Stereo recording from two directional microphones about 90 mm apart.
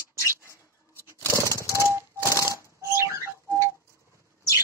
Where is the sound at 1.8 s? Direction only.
35° left (ahead or behind).